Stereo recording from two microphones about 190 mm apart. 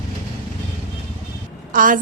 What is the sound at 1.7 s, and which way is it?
Speech, 45° right (ahead or behind).